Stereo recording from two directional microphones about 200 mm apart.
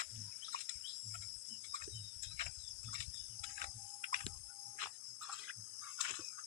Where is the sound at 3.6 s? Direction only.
35° left (ahead or behind).